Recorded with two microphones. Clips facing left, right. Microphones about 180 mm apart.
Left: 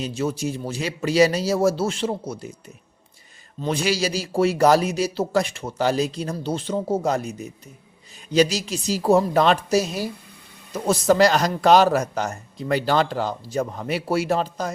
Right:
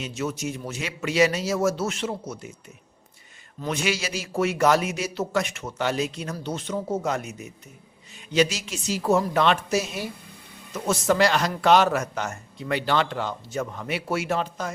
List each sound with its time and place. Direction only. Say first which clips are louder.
0.0 s a man's voice: left 4 dB; 30° left (ahead or behind)
3.6 s a man's voice: left 4 dB; 35° left (ahead or behind)